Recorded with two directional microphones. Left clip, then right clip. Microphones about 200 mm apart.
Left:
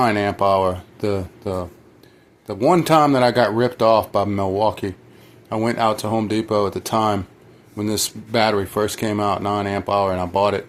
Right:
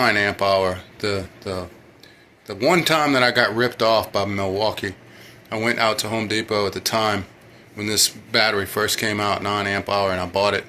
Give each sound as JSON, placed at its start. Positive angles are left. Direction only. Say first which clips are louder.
{"t": 0.0, "sound": "speech", "louder": "left 1 dB", "side_deg": 55}